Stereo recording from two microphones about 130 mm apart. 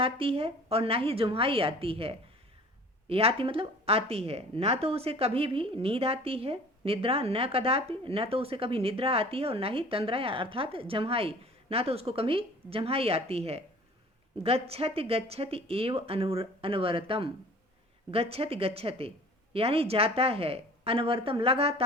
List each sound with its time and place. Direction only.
0.0 s a woman's voice: 45° right (ahead or behind)